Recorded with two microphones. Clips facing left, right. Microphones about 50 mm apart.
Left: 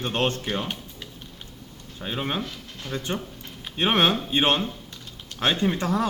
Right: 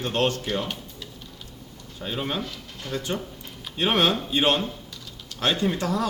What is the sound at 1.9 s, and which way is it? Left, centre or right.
A man's voice, centre.